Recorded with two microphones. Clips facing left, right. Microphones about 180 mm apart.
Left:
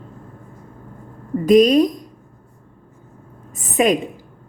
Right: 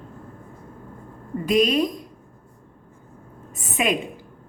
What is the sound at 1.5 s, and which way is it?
Speech, 40° left (ahead or behind).